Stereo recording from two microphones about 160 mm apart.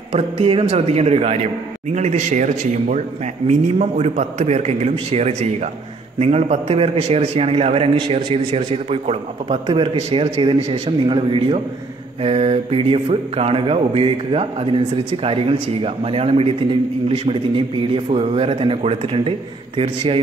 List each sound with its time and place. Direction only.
0.1 s a man's voice: 35° right (ahead or behind)